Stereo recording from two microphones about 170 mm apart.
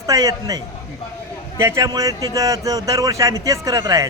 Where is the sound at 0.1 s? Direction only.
20° right (ahead or behind).